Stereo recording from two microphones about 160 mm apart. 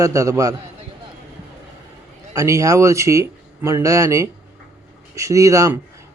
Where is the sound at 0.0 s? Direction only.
20° right (ahead or behind).